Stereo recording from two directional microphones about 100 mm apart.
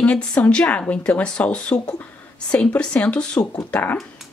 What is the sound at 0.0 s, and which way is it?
A woman's voice, 10° left (ahead or behind).